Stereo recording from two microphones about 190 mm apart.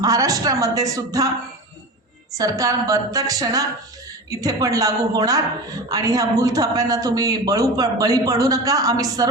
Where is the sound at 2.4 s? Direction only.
20° right (ahead or behind).